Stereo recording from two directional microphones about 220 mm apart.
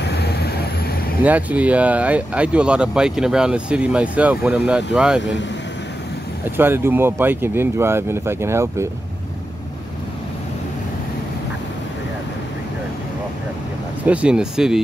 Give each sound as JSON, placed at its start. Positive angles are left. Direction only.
{"t": 0.0, "sound": "vehicle", "side_deg": 50}
{"t": 1.2, "sound": "speech", "side_deg": -5}
{"t": 6.5, "sound": "speech", "side_deg": -10}
{"t": 14.0, "sound": "speech", "side_deg": -5}